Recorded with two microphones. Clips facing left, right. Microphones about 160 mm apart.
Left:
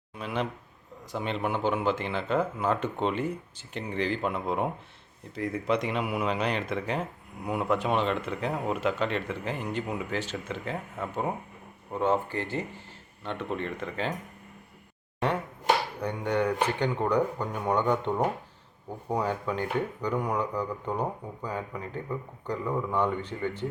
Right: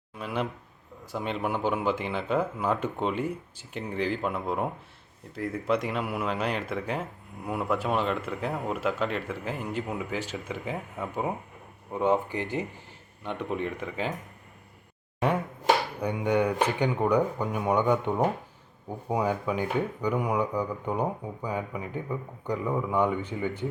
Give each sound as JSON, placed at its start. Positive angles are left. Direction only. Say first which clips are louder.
{"t": 0.2, "sound": "speech", "louder": "even", "side_deg": -5}
{"t": 16.0, "sound": "speech", "louder": "right 2 dB", "side_deg": -10}